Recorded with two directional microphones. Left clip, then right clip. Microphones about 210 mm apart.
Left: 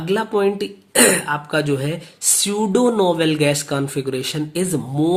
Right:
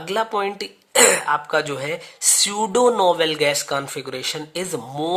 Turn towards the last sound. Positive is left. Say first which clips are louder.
# left 5 dB
turn(degrees=-20)  # may be behind; listen again after turning